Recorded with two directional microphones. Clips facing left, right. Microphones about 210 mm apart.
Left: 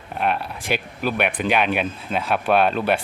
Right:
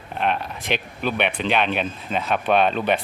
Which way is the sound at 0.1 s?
5° left (ahead or behind).